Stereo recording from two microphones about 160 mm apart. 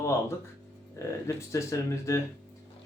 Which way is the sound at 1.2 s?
20° left (ahead or behind).